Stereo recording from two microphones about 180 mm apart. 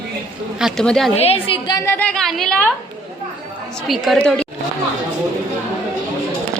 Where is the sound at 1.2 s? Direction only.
30° left (ahead or behind).